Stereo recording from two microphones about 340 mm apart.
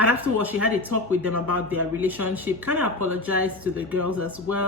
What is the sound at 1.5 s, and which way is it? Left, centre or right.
Speech, right.